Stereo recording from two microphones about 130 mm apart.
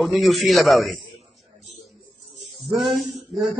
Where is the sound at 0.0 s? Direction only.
Centre (ahead or behind).